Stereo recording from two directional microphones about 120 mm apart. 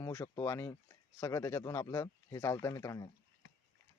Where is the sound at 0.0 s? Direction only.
25° left (ahead or behind).